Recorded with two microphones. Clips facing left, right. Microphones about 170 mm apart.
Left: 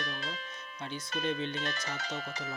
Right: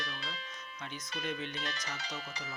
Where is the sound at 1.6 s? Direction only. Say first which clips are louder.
Left 4 dB; 50° left (ahead or behind).